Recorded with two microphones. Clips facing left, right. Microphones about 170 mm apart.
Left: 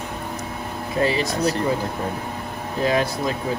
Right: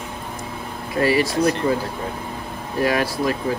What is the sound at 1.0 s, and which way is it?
Speech, 25° left (ahead or behind).